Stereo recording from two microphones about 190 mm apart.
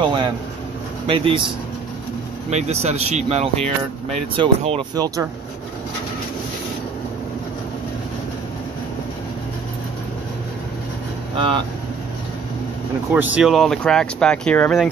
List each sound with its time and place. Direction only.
0.0 s vehicle: 25° right (ahead or behind)
1.0 s speech: 30° right (ahead or behind)
2.5 s speech: 35° right (ahead or behind); by 5.2 s 20° right (ahead or behind)
11.3 s speech: 25° right (ahead or behind)
13.1 s speech: 5° right (ahead or behind)